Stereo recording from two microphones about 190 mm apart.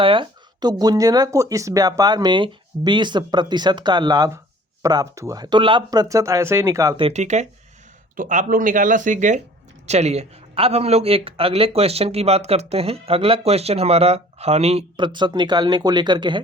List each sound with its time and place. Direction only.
0.0 s speech: 25° right (ahead or behind)
7.0 s speech: 35° right (ahead or behind)